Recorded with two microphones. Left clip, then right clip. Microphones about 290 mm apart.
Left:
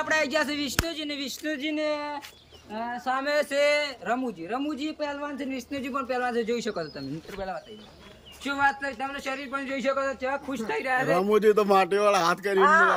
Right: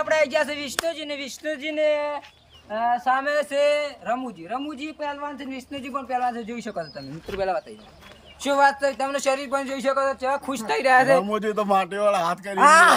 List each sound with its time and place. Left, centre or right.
0.0 s speech: centre
8.4 s speech: centre
11.2 s speech: centre
12.6 s speech: right